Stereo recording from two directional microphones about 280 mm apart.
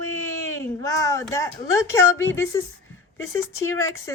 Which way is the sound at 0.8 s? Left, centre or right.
Centre.